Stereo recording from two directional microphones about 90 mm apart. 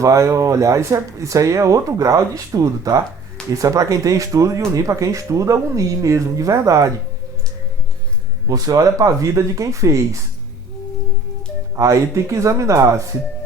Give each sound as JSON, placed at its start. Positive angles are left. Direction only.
{"t": 0.0, "sound": "speech", "side_deg": -35}
{"t": 8.4, "sound": "speech", "side_deg": -40}
{"t": 11.8, "sound": "speech", "side_deg": -35}